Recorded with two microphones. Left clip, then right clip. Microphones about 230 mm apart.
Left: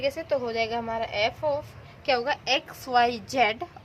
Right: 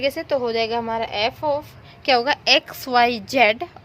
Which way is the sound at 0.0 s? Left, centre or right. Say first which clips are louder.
Right 5 dB; right.